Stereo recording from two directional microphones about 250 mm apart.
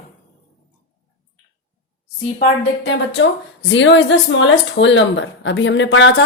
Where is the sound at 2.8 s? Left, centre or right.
Left.